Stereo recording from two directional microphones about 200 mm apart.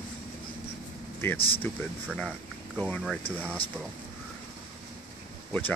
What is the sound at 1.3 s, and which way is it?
Speech, 25° left (ahead or behind).